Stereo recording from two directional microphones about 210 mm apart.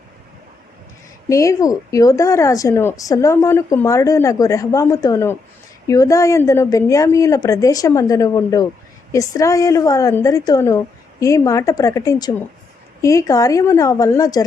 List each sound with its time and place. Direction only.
1.3 s a woman's voice: 15° left (ahead or behind)